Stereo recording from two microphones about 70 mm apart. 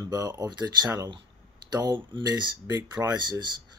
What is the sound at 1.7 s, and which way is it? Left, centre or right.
Speech, right.